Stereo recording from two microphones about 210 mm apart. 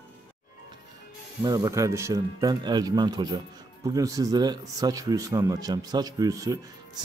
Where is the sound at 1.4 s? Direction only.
15° right (ahead or behind).